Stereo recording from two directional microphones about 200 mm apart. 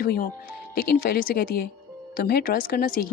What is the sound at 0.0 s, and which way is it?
Speech, 45° left (ahead or behind).